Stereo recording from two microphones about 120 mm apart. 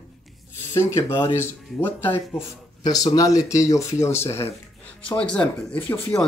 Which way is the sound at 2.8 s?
35° left (ahead or behind).